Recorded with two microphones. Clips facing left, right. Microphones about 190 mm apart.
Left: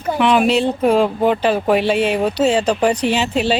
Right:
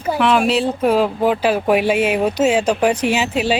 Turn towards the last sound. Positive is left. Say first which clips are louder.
# left 1 dB
turn(degrees=-10)  # may be behind; listen again after turning